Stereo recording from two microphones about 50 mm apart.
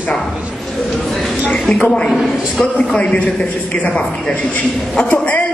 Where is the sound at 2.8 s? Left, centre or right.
Left.